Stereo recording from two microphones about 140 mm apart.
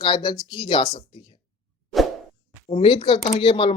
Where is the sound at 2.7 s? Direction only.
40° left (ahead or behind).